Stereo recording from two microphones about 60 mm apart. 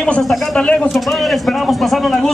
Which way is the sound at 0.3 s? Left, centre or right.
Centre.